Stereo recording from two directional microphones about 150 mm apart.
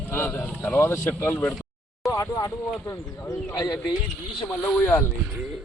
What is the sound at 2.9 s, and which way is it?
Speech, 20° left (ahead or behind).